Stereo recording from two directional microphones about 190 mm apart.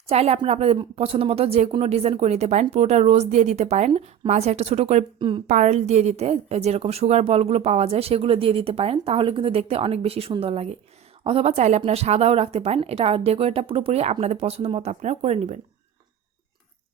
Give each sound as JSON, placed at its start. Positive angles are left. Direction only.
{"t": 0.1, "sound": "speech", "side_deg": -35}